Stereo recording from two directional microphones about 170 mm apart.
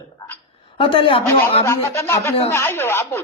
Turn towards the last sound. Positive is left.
turn(degrees=15)  # may be behind; listen again after turning